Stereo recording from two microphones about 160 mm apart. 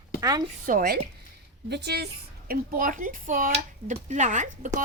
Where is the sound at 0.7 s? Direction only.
65° right (ahead or behind).